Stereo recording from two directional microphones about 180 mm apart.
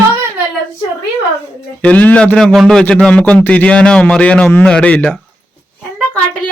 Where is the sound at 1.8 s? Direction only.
10° left (ahead or behind).